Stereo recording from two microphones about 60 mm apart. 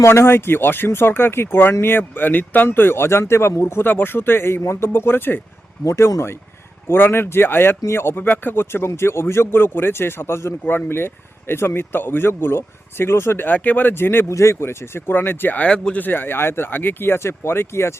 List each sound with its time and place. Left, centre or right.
0.0 s speech: left
3.8 s speech: left
5.8 s speech: left
6.8 s speech: left
8.2 s speech: left
14.3 s speech: left
14.5 s speech: left; by 16.0 s centre
16.0 s speech: left